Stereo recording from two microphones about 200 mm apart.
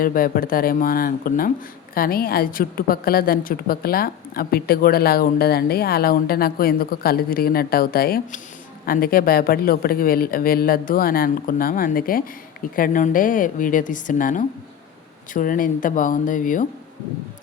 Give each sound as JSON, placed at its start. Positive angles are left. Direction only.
{"t": 0.0, "sound": "a woman's voice", "side_deg": 45}